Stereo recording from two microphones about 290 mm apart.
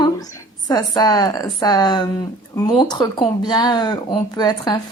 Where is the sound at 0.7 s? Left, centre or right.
Centre.